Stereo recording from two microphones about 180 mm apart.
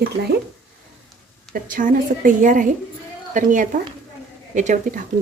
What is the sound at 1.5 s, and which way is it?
A woman's voice, 50° right (ahead or behind).